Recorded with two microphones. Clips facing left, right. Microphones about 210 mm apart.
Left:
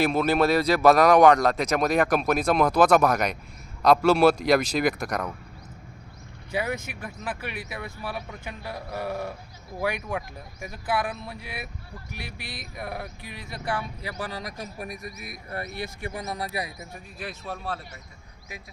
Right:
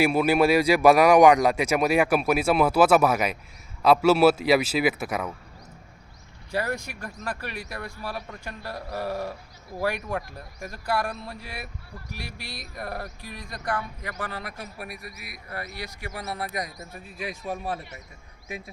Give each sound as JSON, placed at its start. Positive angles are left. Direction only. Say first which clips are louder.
{"t": 0.0, "sound": "speech", "louder": "right 2 dB", "side_deg": -10}
{"t": 6.5, "sound": "a man's voice", "louder": "even", "side_deg": 0}
{"t": 14.8, "sound": "a man's voice", "louder": "left 3 dB", "side_deg": 45}
{"t": 16.1, "sound": "a man's voice", "louder": "right 1 dB", "side_deg": 15}
{"t": 17.2, "sound": "speech", "louder": "right 4 dB", "side_deg": -10}